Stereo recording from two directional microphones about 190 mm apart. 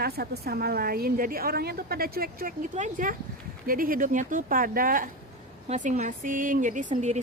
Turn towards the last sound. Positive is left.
turn(degrees=-40)  # may be behind; listen again after turning